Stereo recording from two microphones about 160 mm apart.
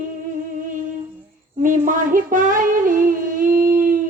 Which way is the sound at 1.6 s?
55° right (ahead or behind).